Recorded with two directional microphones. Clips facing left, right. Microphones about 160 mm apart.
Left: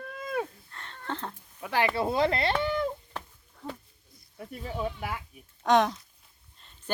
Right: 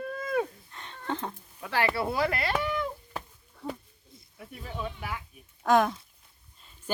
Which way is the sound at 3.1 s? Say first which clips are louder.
Right 1 dB; 5° right (ahead or behind).